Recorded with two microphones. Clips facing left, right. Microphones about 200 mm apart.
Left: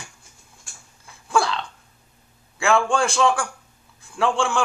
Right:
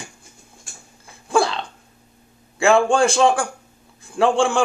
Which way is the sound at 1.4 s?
25° right (ahead or behind).